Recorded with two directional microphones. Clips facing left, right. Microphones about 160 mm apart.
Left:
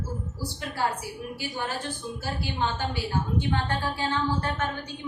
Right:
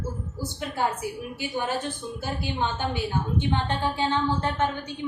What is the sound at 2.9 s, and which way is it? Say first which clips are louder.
A woman's voice: right 1 dB; 20° right (ahead or behind).